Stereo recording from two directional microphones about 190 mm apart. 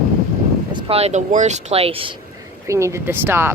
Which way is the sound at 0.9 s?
35° right (ahead or behind).